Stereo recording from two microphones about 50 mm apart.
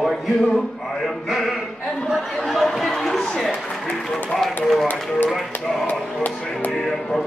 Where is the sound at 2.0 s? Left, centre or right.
Centre.